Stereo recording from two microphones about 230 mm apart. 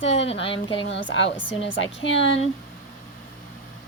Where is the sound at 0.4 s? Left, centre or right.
Left.